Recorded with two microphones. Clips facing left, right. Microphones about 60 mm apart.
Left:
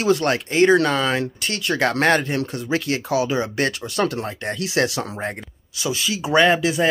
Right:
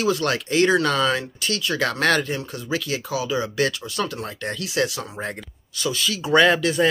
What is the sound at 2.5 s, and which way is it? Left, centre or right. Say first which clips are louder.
Speech: left 3 dB; left.